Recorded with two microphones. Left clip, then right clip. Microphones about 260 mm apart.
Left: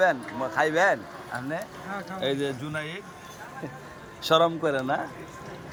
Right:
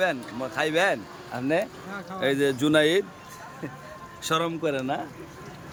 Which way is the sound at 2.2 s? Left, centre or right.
Centre.